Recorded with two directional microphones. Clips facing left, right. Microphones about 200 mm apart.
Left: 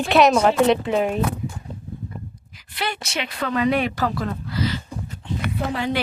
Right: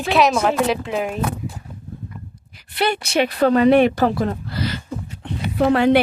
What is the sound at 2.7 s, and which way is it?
Speech, 60° right (ahead or behind).